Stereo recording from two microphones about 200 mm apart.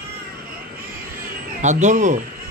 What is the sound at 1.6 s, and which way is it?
Speech, 35° right (ahead or behind).